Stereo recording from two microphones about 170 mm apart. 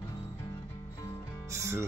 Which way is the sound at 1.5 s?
15° right (ahead or behind).